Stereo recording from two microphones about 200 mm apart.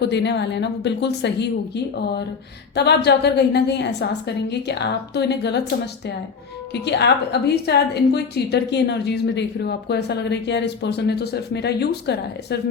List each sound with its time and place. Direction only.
0.0 s a woman's voice: 60° left (ahead or behind)